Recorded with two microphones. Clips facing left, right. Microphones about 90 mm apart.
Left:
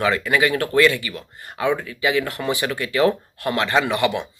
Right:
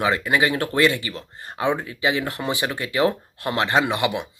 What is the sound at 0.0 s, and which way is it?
Speech, 25° right (ahead or behind).